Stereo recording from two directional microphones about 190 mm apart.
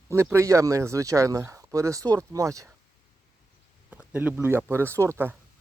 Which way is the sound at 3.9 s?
5° right (ahead or behind).